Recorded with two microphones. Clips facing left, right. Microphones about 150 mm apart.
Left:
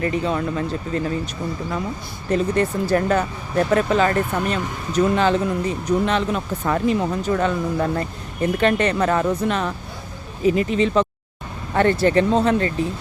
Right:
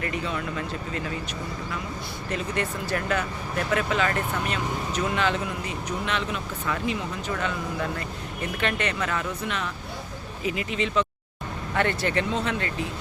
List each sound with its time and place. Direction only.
0.0 s speech: 30° left (ahead or behind)
2.3 s speech: 35° left (ahead or behind)